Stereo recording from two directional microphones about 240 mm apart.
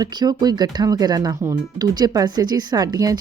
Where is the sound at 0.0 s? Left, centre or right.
Centre.